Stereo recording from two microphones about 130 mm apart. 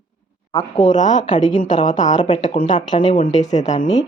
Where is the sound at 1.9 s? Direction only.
65° left (ahead or behind).